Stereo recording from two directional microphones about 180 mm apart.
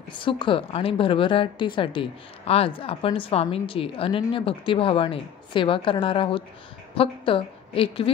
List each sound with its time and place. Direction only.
0.2 s a woman's voice: 30° left (ahead or behind)